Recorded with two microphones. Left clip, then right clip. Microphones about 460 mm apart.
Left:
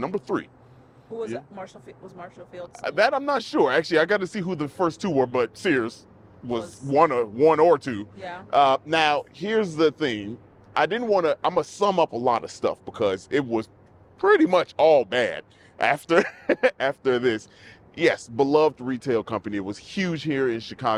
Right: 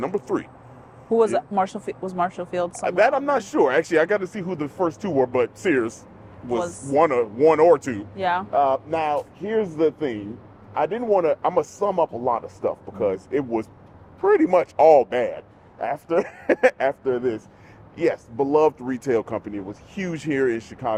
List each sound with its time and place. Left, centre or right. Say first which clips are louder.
0.0 s speech: right 2 dB; left
1.2 s speech: right 12 dB; right
3.0 s speech: right 2 dB; left
8.2 s speech: right 13 dB; right
8.4 s speech: left 6 dB; left
11.8 s speech: left 1 dB; left
15.4 s speech: left 4 dB; left
16.5 s speech: right 3 dB; left
17.0 s speech: left 1 dB; left
17.9 s speech: left 1 dB; left
20.1 s speech: right 3 dB; left